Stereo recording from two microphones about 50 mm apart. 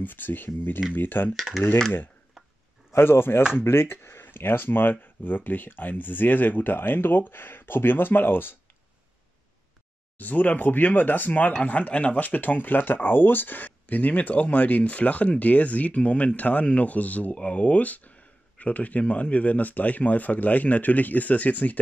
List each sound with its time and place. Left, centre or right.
0.0 s speech: left
1.3 s speech: centre
2.4 s a sound: centre
2.9 s speech: left
10.1 s speech: left